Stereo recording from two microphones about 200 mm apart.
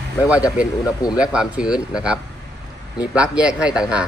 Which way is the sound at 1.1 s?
5° right (ahead or behind).